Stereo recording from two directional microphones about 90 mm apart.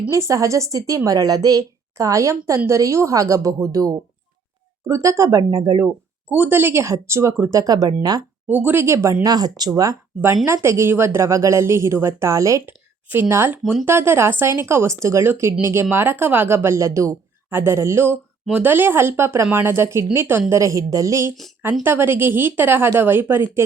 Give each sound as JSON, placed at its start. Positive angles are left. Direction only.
{"t": 0.1, "sound": "speech", "side_deg": -35}
{"t": 5.4, "sound": "speech", "side_deg": -45}
{"t": 6.3, "sound": "speech", "side_deg": -20}
{"t": 7.5, "sound": "speech", "side_deg": -40}
{"t": 8.4, "sound": "speech", "side_deg": -20}
{"t": 9.2, "sound": "speech", "side_deg": -45}
{"t": 10.2, "sound": "speech", "side_deg": -25}